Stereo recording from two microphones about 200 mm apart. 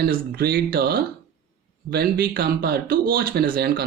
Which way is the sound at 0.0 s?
50° right (ahead or behind).